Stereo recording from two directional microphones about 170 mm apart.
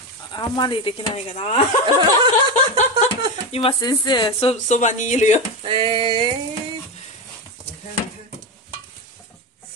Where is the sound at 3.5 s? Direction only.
30° left (ahead or behind); by 5.4 s 45° left (ahead or behind).